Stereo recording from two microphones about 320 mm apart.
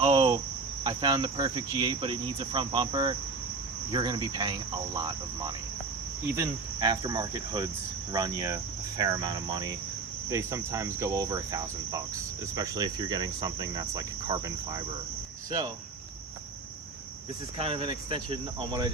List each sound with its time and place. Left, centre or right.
0.0 s cricket: centre
17.6 s cricket: centre